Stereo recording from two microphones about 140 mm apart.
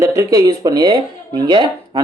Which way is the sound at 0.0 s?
25° right (ahead or behind).